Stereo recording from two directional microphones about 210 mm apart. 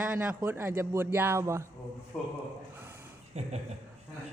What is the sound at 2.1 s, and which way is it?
Speech, 5° left (ahead or behind).